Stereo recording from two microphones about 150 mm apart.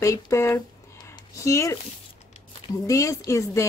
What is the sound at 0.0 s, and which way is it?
Speech, 20° left (ahead or behind).